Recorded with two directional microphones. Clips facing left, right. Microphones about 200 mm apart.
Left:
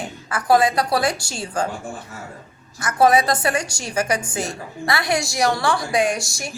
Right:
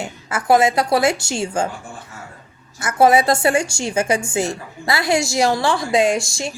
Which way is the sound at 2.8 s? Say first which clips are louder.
Right 2 dB; 25° right (ahead or behind).